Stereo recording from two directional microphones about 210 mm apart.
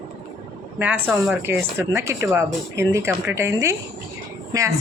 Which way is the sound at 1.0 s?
10° right (ahead or behind).